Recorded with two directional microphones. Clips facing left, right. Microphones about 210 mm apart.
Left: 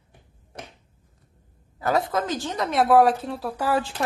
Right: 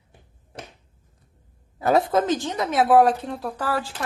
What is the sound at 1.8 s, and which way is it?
Speech, 25° right (ahead or behind).